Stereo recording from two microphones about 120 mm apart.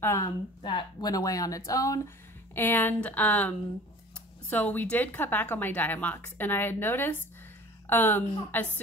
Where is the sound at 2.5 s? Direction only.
15° left (ahead or behind).